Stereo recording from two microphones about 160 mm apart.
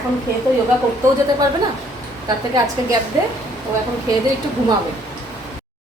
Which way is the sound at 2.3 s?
25° right (ahead or behind).